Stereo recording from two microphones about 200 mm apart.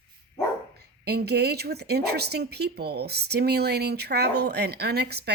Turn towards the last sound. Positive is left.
turn(degrees=-55)  # may be behind; listen again after turning